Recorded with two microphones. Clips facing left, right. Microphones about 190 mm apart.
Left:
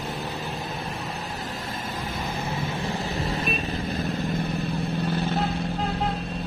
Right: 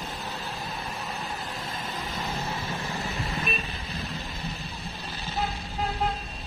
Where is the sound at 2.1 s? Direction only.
55° left (ahead or behind).